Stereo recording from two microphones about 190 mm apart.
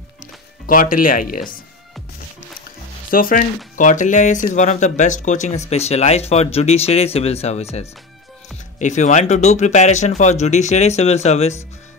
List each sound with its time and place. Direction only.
0.7 s speech: 45° left (ahead or behind)
3.1 s speech: 50° left (ahead or behind)
8.7 s speech: 40° left (ahead or behind)